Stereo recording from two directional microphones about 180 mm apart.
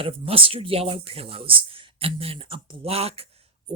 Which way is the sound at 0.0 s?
30° right (ahead or behind).